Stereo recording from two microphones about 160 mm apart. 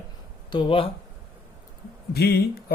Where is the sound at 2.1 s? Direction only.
80° left.